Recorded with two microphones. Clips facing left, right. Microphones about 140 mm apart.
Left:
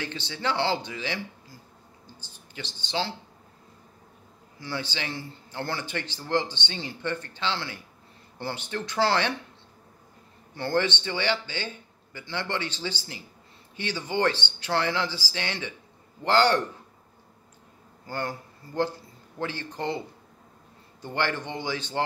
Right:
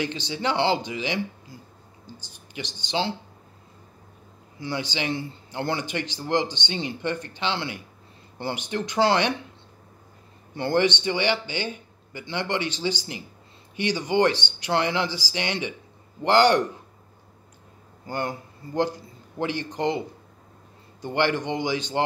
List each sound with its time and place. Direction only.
0.0 s a man's voice: 15° right (ahead or behind)
4.6 s a man's voice: 15° right (ahead or behind)
10.5 s a man's voice: 20° right (ahead or behind)
18.0 s a man's voice: 20° right (ahead or behind)
21.0 s a man's voice: 15° right (ahead or behind)